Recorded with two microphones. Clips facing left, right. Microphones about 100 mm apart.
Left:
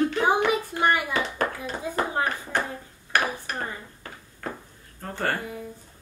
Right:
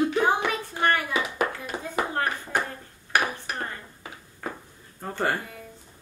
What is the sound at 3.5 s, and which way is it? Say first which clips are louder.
Dishes: left 1 dB; 10° right (ahead or behind).